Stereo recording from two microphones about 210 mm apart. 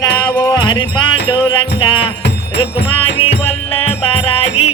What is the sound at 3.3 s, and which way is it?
Music, 30° left (ahead or behind).